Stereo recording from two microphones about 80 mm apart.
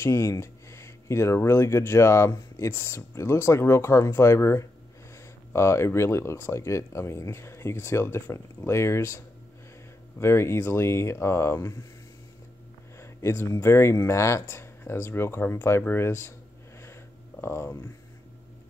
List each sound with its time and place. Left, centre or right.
0.0 s speech: left
12.9 s speech: left
16.8 s a sound: left